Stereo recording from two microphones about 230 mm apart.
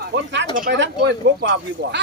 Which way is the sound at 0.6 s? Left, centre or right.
Right.